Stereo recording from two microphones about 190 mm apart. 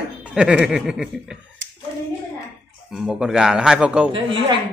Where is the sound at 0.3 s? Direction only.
5° right (ahead or behind).